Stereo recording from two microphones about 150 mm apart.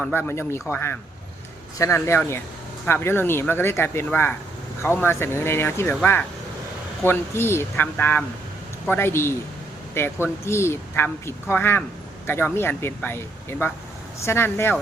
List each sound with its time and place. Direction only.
0.0 s speech: 15° left (ahead or behind)